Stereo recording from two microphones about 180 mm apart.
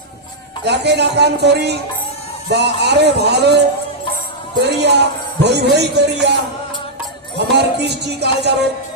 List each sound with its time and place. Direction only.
0.6 s speech: 70° right (ahead or behind)